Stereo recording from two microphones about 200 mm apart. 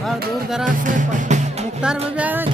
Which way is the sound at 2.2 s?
10° right (ahead or behind).